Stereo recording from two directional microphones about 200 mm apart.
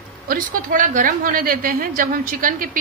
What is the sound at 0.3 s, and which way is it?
A woman's voice, 40° right (ahead or behind).